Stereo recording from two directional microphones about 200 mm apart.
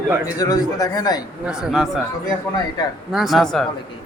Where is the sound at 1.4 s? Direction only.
5° right (ahead or behind).